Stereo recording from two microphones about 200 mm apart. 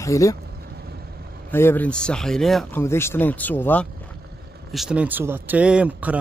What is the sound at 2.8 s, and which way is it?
Speech, 10° left (ahead or behind).